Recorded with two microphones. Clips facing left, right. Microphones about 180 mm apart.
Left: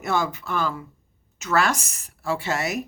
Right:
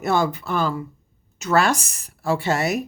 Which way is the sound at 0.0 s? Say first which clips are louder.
Right 4 dB; 35° right (ahead or behind).